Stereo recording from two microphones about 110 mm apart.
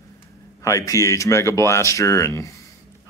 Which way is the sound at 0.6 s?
30° left (ahead or behind).